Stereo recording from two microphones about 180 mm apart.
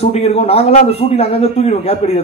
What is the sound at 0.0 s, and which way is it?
A man's voice, 35° left (ahead or behind).